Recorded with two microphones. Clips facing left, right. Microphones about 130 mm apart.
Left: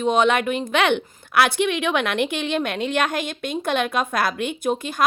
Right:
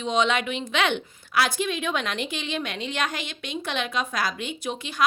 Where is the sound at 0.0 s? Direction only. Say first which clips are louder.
Left 5 dB; 55° left (ahead or behind).